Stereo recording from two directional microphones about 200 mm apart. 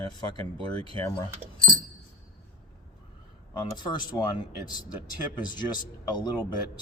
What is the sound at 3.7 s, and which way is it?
Speech, 20° left (ahead or behind).